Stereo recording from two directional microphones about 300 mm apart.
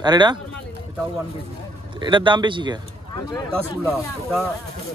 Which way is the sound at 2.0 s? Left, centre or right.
Centre.